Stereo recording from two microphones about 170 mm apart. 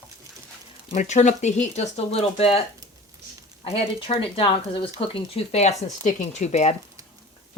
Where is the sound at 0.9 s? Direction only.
45° left (ahead or behind).